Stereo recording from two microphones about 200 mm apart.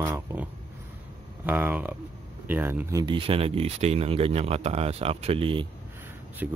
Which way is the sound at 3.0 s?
25° right (ahead or behind).